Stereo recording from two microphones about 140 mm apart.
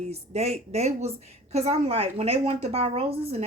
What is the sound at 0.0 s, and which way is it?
Speech, 50° right (ahead or behind).